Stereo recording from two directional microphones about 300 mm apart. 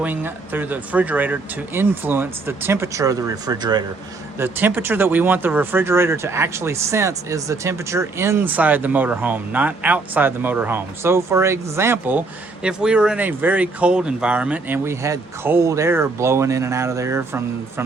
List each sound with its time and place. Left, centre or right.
0.0 s speech: centre